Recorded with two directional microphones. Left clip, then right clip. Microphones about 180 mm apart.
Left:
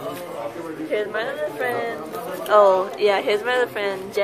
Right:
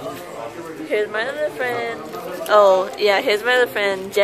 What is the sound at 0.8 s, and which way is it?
A woman's voice, 35° right (ahead or behind).